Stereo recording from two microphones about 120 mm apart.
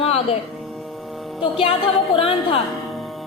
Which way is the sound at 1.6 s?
50° left (ahead or behind).